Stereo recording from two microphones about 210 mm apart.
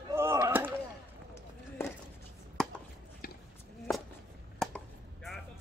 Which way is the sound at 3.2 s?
40° left (ahead or behind).